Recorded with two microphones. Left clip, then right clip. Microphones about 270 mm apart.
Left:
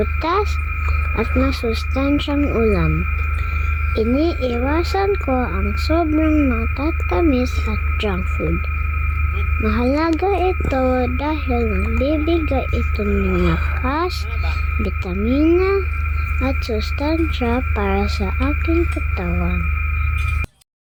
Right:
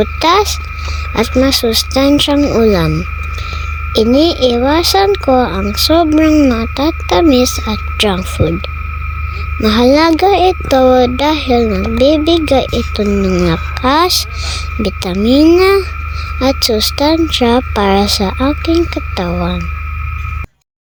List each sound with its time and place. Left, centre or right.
0.0 s speech: right
3.9 s speech: right
9.6 s speech: right